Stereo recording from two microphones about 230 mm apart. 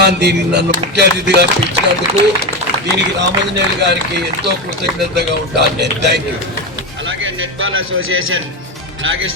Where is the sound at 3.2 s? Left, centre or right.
Right.